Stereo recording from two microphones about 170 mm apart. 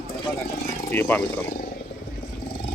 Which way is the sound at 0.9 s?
10° left (ahead or behind).